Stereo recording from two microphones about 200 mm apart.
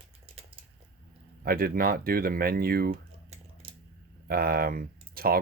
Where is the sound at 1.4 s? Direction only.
50° right (ahead or behind).